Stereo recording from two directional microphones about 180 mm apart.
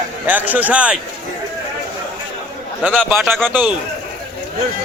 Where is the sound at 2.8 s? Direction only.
Centre (ahead or behind).